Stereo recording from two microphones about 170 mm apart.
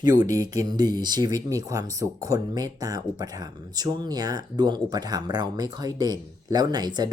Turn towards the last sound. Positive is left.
turn(degrees=-25)  # may be behind; listen again after turning